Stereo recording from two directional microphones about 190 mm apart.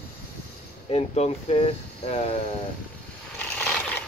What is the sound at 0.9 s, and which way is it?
Speech, 35° left (ahead or behind).